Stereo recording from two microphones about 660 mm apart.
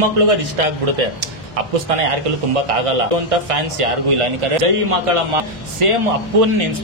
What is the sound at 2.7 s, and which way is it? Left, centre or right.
A man's voice, right.